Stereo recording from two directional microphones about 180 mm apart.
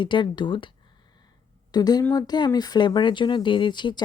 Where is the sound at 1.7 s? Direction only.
20° left (ahead or behind).